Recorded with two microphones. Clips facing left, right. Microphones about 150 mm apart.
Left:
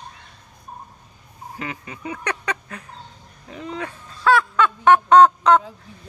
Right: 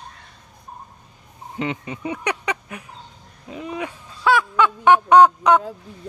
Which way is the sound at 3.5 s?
15° right (ahead or behind).